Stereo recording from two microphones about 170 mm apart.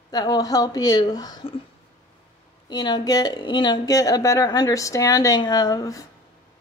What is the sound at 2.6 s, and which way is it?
Speech, 25° left (ahead or behind).